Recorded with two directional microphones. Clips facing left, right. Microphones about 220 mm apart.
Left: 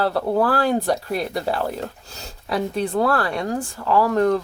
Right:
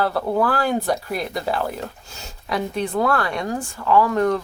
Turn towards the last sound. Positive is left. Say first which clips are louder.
# even
turn(degrees=35)  # may be behind; listen again after turning